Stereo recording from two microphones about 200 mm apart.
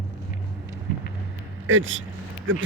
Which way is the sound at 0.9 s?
45° left (ahead or behind).